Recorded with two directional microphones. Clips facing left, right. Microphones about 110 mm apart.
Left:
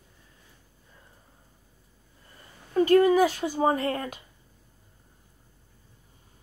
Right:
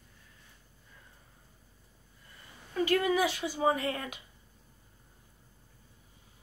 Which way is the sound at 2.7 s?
40° left (ahead or behind).